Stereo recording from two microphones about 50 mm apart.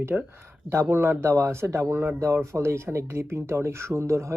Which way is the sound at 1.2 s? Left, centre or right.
Right.